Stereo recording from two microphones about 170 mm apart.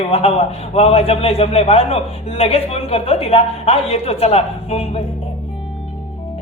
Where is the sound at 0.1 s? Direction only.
35° left (ahead or behind).